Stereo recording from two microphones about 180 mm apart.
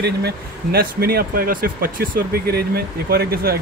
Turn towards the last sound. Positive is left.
turn(degrees=-60)  # may be behind; listen again after turning